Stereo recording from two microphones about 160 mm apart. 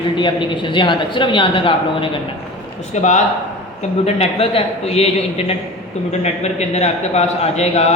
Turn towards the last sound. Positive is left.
turn(degrees=45)  # may be behind; listen again after turning